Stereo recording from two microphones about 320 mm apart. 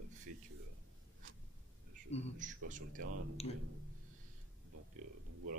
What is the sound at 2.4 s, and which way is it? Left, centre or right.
Speech, right.